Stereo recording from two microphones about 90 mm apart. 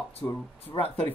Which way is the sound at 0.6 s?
90° left.